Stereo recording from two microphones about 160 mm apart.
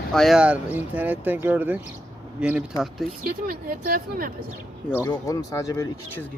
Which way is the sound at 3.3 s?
65° right (ahead or behind).